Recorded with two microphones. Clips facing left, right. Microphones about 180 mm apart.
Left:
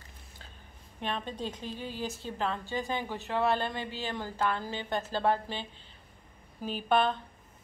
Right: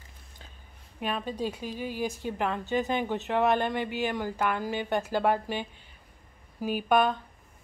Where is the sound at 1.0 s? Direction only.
10° right (ahead or behind).